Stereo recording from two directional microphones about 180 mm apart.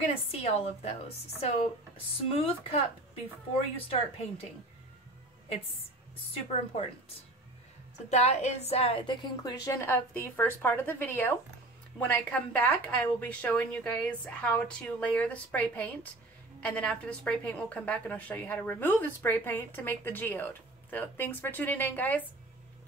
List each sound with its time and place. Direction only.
0.1 s a woman's voice: 35° left (ahead or behind)
8.1 s a woman's voice: 40° left (ahead or behind)
9.7 s a woman's voice: 15° left (ahead or behind)